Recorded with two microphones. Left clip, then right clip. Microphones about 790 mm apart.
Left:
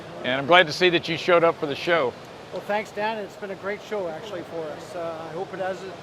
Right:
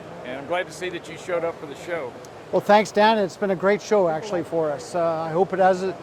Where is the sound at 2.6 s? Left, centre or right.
Right.